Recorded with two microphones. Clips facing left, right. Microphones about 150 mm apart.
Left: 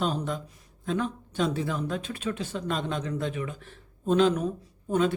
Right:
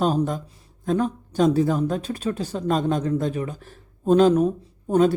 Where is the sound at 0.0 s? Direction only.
45° right (ahead or behind).